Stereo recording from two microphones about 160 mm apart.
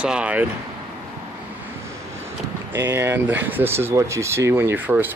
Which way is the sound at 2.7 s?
15° right (ahead or behind).